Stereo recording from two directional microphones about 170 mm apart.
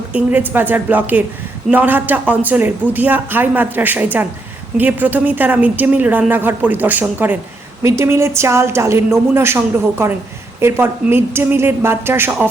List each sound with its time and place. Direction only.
0.1 s a woman's voice: 10° right (ahead or behind)
10.6 s a woman's voice: 15° right (ahead or behind)